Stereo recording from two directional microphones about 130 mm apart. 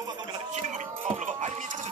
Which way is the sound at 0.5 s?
70° right (ahead or behind).